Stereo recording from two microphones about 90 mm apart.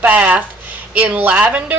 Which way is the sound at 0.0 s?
20° right (ahead or behind).